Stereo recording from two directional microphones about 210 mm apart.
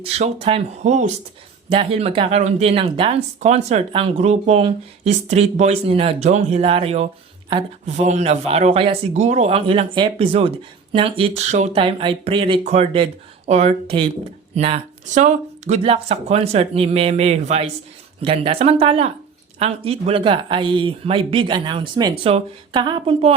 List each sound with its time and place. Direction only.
0.0 s speech: 30° right (ahead or behind)